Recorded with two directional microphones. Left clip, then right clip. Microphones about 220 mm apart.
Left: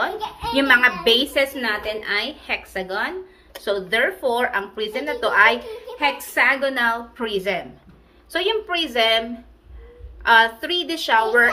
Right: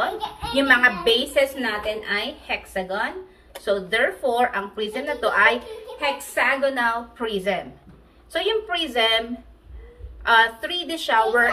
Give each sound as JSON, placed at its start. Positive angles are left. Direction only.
{"t": 0.7, "sound": "speech", "side_deg": 45}
{"t": 10.2, "sound": "speech", "side_deg": 45}